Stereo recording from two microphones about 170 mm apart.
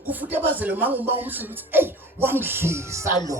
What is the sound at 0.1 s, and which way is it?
Speech, 10° right (ahead or behind).